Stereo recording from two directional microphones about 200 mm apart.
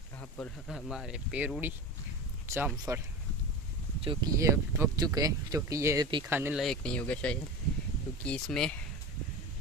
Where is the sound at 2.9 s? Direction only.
15° right (ahead or behind).